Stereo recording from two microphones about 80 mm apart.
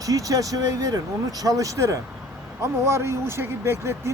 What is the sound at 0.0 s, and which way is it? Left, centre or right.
Speech, right.